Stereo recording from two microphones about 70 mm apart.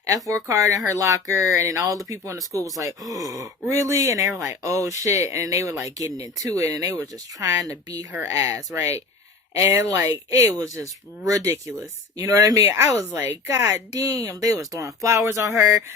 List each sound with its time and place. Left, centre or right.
0.1 s speech: right
12.3 s speech: right
12.6 s speech: right
13.1 s speech: right